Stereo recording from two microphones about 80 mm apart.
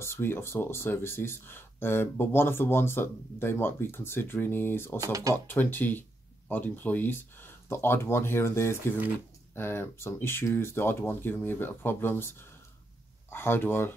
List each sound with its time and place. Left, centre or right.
0.0 s speech: left
5.0 s speech: right
5.3 s speech: left